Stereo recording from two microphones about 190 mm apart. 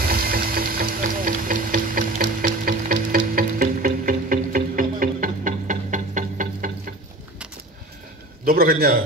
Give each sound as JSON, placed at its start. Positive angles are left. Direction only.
{"t": 0.0, "sound": "sewing machine", "side_deg": -50}
{"t": 2.4, "sound": "music", "side_deg": -50}
{"t": 8.5, "sound": "a man's voice", "side_deg": -50}